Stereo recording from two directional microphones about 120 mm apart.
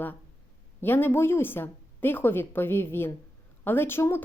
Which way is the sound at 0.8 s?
15° left (ahead or behind).